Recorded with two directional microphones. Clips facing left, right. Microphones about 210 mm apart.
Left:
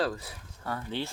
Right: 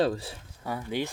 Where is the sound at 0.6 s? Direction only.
15° right (ahead or behind).